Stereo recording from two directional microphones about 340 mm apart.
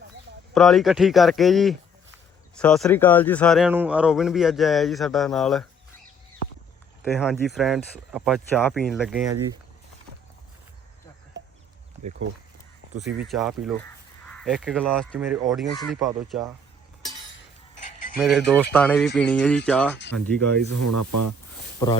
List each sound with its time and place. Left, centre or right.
0.5 s a man's voice: centre
7.1 s a man's voice: centre
12.9 s speech: right
13.1 s a man's voice: centre
18.2 s a man's voice: centre
20.7 s speech: right
21.8 s speech: centre